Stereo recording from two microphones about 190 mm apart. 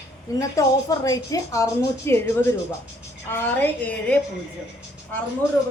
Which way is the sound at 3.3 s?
10° left (ahead or behind).